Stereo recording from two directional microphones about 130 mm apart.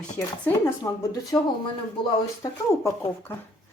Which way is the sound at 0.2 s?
10° left (ahead or behind).